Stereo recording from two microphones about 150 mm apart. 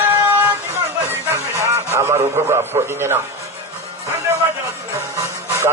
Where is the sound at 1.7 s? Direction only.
20° right (ahead or behind).